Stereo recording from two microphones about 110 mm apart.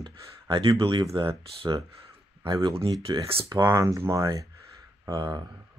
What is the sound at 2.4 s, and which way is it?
Speech, 50° right (ahead or behind).